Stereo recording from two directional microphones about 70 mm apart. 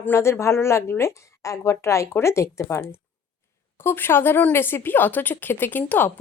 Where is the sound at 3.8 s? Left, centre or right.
Left.